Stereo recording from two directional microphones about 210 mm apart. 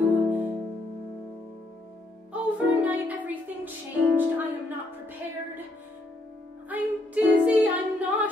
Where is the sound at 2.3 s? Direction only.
5° right (ahead or behind).